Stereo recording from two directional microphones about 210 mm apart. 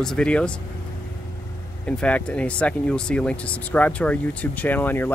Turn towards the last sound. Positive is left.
turn(degrees=10)  # may be behind; listen again after turning